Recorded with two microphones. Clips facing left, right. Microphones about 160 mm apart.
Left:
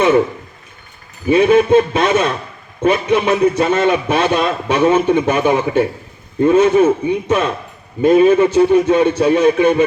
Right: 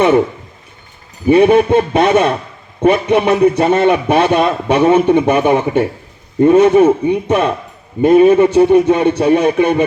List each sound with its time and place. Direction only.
1.3 s a man's voice: 60° right (ahead or behind)